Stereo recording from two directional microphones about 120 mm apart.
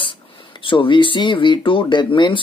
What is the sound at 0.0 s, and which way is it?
Speech, 45° left (ahead or behind).